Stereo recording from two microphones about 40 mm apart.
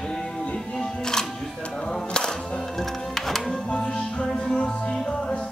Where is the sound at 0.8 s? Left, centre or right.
Centre.